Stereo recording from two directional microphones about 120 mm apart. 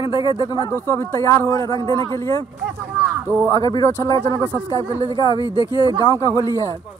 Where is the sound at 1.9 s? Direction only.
40° right (ahead or behind).